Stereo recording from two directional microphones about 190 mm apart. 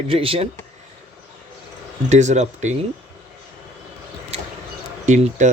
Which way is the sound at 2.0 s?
40° right (ahead or behind).